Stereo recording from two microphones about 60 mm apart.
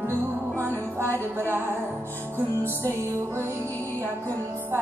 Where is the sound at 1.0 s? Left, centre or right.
Right.